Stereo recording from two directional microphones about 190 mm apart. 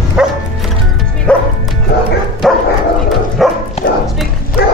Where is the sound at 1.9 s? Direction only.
55° left (ahead or behind).